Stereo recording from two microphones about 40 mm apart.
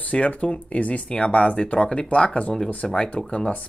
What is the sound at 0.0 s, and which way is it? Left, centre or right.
Speech, left.